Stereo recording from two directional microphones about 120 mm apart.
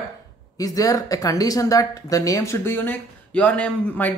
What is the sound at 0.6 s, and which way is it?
A woman's voice, 30° left (ahead or behind).